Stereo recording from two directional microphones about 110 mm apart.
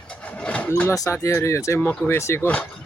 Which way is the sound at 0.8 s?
30° left (ahead or behind).